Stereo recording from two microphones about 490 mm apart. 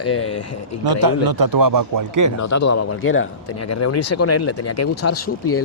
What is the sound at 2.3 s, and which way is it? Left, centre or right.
A man's voice, left.